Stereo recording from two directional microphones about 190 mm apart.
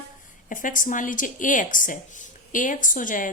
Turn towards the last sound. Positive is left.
turn(degrees=45)  # may be behind; listen again after turning